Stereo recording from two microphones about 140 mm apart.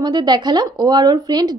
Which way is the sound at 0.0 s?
30° right (ahead or behind).